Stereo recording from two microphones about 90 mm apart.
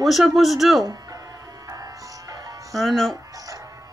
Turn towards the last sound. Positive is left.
turn(degrees=0)  # may be behind; listen again after turning